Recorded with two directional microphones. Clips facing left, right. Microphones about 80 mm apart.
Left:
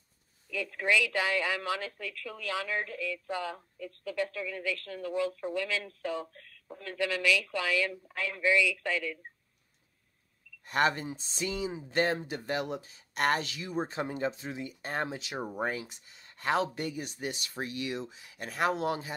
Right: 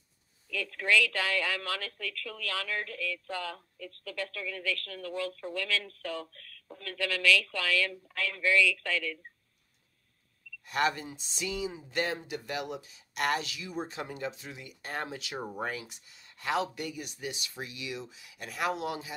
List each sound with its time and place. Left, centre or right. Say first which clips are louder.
0.5 s a woman's voice: even; centre
10.6 s speech: left 2 dB; left